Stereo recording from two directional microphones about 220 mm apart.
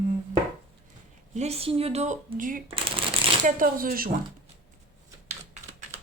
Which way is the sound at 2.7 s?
25° right (ahead or behind).